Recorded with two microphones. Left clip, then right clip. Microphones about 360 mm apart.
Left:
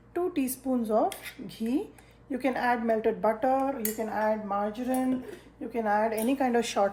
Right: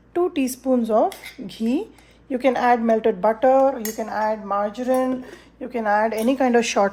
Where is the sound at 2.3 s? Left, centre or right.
Right.